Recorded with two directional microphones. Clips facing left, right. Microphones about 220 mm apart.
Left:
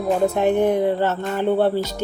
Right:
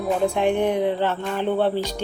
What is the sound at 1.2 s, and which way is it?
Speech, 10° left (ahead or behind).